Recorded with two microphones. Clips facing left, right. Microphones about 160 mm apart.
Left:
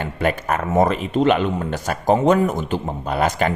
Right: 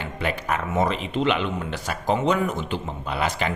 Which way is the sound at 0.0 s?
50° left (ahead or behind).